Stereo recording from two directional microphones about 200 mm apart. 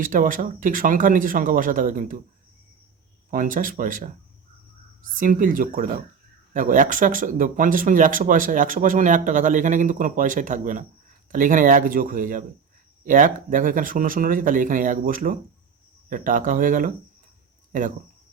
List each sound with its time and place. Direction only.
0.0 s speech: 40° right (ahead or behind)
3.2 s speech: 45° right (ahead or behind)
5.1 s speech: 40° right (ahead or behind)